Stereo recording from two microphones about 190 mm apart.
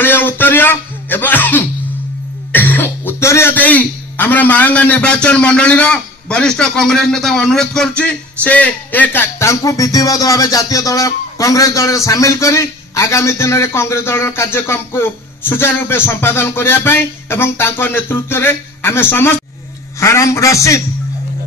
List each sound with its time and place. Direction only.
0.0 s music: 10° left (ahead or behind)
2.5 s speech: 10° left (ahead or behind)